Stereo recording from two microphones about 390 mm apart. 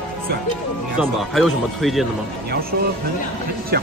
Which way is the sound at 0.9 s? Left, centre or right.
Centre.